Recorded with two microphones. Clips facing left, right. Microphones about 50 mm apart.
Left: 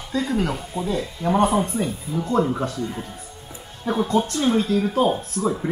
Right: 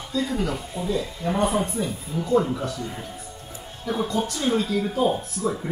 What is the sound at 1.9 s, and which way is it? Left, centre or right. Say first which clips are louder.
Speech: left 3 dB; centre.